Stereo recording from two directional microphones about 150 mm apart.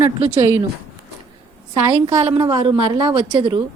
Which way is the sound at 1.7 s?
30° right (ahead or behind).